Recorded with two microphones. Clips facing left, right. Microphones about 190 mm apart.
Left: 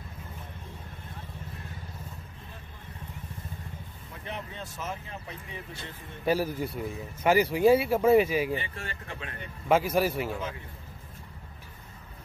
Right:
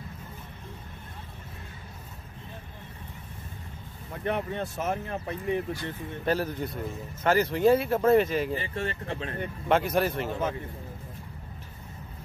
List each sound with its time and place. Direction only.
4.2 s speech: 55° right (ahead or behind)
6.2 s speech: 10° left (ahead or behind)
8.5 s speech: 35° right (ahead or behind)
9.7 s speech: 5° left (ahead or behind)